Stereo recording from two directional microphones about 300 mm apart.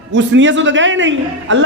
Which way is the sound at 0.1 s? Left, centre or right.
Right.